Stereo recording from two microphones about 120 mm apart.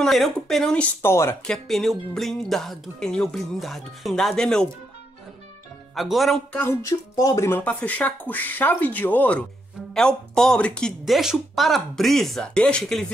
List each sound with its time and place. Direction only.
0.0 s speech: centre (ahead or behind)
1.0 s speech: 20° left (ahead or behind)
1.4 s speech: 5° left (ahead or behind)
5.9 s speech: centre (ahead or behind)
6.6 s speech: 25° left (ahead or behind); by 13.0 s 5° left (ahead or behind)